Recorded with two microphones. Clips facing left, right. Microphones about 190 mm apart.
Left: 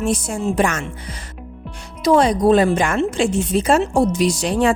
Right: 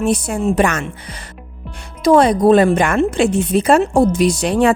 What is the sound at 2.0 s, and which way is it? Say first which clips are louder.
A woman's voice: right 3 dB; 55° right (ahead or behind).